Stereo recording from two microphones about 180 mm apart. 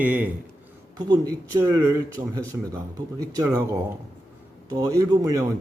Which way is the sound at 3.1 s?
20° right (ahead or behind).